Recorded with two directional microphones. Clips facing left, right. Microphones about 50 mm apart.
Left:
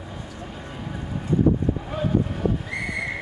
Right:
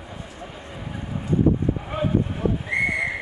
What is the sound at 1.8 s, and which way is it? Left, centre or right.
Vehicle, right.